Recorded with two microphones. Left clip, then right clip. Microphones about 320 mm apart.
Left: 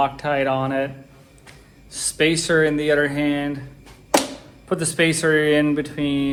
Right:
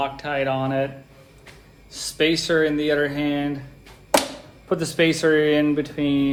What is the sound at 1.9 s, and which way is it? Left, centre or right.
Speech, left.